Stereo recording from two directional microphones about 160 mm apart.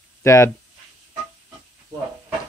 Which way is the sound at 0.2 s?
20° left (ahead or behind).